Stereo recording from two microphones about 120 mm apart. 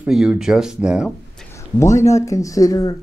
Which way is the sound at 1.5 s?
25° left (ahead or behind).